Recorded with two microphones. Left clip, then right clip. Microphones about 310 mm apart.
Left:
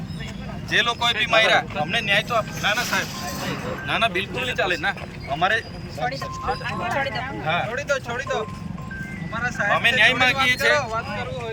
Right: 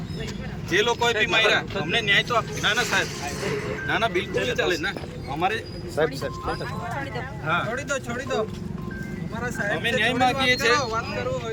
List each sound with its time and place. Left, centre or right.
0.7 s speech: centre
5.4 s speech: centre
7.4 s speech: centre
10.8 s speech: centre